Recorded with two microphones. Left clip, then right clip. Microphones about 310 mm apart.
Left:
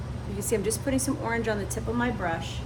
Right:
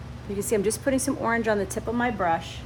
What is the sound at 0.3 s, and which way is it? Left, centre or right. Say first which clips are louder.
Speech: right 3 dB; right.